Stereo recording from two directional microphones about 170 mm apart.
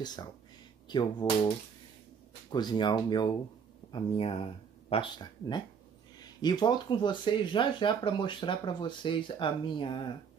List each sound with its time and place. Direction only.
0.0 s speech: 25° left (ahead or behind)
2.5 s speech: 25° left (ahead or behind)
6.1 s speech: 25° left (ahead or behind)